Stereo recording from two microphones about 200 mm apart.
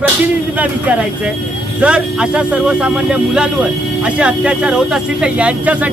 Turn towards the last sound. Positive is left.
turn(degrees=-5)  # may be behind; listen again after turning